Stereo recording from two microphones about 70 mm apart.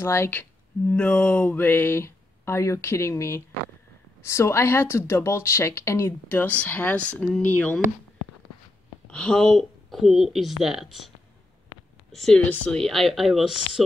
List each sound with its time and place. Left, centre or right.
0.0 s speech: left
6.2 s speech: left
9.0 s a woman's voice: centre
12.1 s a woman's voice: centre